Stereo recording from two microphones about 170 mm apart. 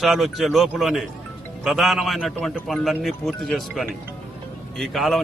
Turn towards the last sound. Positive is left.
turn(degrees=0)  # may be behind; listen again after turning